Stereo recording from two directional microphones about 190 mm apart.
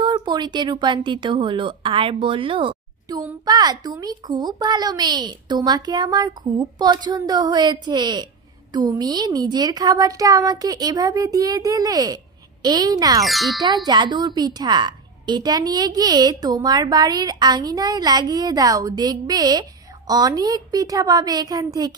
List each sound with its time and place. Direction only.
0.0 s a woman's voice: 25° right (ahead or behind)
13.2 s a child's voice: centre (ahead or behind)
13.8 s a woman's voice: 25° right (ahead or behind)